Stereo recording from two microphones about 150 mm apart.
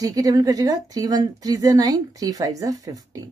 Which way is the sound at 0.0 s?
25° right (ahead or behind).